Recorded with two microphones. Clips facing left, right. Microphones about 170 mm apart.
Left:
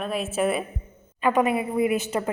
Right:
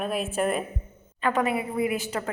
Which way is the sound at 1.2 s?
15° left (ahead or behind).